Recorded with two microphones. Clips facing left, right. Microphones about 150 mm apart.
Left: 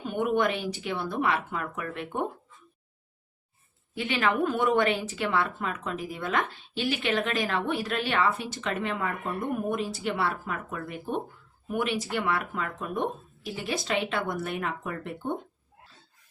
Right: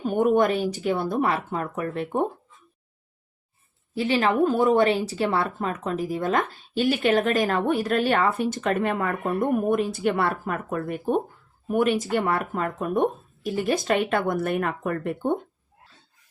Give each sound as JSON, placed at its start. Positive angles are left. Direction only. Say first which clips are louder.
{"t": 0.0, "sound": "speech", "louder": "right 6 dB", "side_deg": -40}
{"t": 3.9, "sound": "speech", "louder": "right 5 dB", "side_deg": -35}